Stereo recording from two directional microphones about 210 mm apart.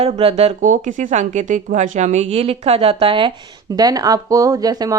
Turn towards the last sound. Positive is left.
turn(degrees=-20)  # may be behind; listen again after turning